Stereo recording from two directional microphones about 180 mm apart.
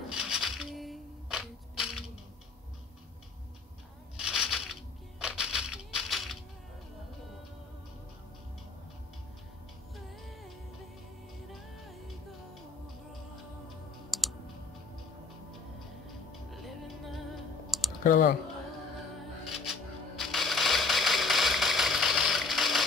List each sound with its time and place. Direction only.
0.1 s music: 5° right (ahead or behind)
4.2 s a sound: 5° right (ahead or behind)
14.1 s computer keyboard: centre (ahead or behind)
16.3 s music: centre (ahead or behind)
17.6 s typing: centre (ahead or behind)
18.0 s speech: 50° left (ahead or behind)
19.5 s a sound: centre (ahead or behind)